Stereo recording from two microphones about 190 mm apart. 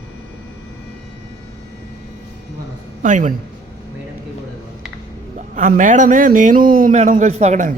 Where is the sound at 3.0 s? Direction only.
40° right (ahead or behind).